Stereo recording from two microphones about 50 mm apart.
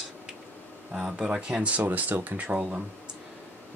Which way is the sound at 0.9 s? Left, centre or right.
Centre.